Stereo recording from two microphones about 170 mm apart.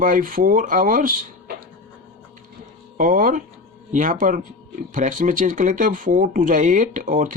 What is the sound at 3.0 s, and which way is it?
Speech, 55° right (ahead or behind).